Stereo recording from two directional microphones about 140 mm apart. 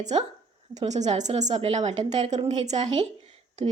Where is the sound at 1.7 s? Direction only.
50° right (ahead or behind).